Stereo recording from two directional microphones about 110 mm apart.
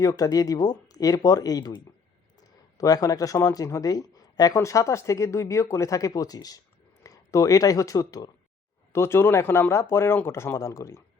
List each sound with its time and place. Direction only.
0.0 s speech: 35° left (ahead or behind)
8.9 s speech: 25° left (ahead or behind)